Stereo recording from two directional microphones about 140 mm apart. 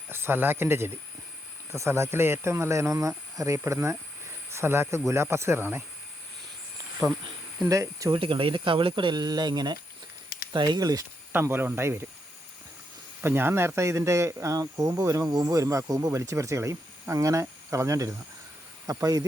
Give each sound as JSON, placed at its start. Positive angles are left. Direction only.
{"t": 0.1, "sound": "speech", "side_deg": -15}
{"t": 7.7, "sound": "speech", "side_deg": -25}
{"t": 8.1, "sound": "speech", "side_deg": -40}
{"t": 13.2, "sound": "speech", "side_deg": -15}